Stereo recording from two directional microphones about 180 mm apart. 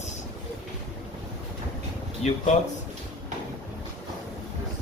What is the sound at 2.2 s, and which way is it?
Speech, 40° left (ahead or behind).